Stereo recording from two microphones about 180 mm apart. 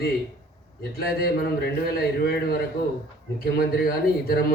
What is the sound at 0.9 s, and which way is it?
A man's voice, 60° left (ahead or behind).